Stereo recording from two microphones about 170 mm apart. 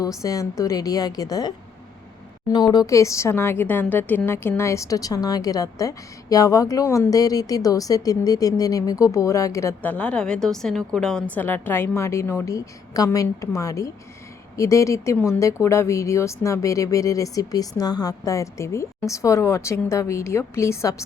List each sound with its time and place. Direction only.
0.2 s a woman's voice: 20° left (ahead or behind)